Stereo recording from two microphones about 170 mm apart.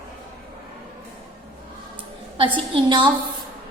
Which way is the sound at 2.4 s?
30° right (ahead or behind).